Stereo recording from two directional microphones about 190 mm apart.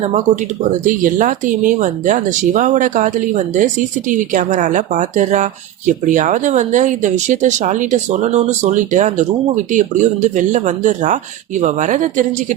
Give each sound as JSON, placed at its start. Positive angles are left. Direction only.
{"t": 0.9, "sound": "speech", "side_deg": -45}